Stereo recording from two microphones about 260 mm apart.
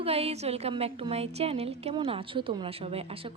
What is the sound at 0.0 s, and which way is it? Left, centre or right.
A woman's voice, right.